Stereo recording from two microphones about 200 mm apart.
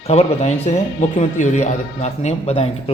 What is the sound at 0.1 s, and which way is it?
Speech, 30° left (ahead or behind).